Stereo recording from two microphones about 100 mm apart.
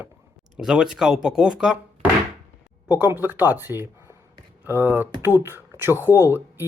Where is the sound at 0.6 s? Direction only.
5° right (ahead or behind).